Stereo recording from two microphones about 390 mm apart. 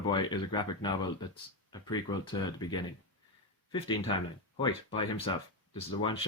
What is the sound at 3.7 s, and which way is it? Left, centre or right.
Speech, centre.